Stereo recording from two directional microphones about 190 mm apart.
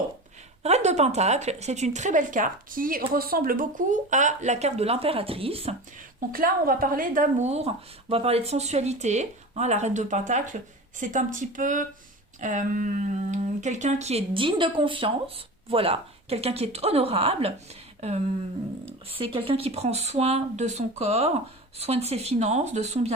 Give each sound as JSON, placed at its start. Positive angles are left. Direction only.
{"t": 0.6, "sound": "speech", "side_deg": -35}
{"t": 6.1, "sound": "speech", "side_deg": -50}